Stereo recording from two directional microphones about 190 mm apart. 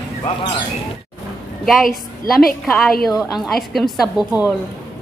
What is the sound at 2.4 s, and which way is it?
Speech, 50° left (ahead or behind).